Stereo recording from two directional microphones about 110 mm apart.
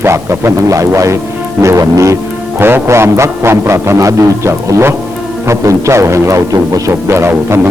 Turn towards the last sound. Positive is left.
turn(degrees=-25)  # may be behind; listen again after turning